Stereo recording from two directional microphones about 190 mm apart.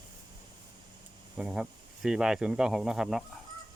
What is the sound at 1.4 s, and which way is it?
Speech, 5° right (ahead or behind).